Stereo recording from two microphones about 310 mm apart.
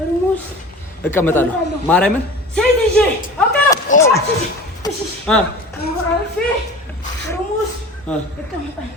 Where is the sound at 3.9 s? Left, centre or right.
Left.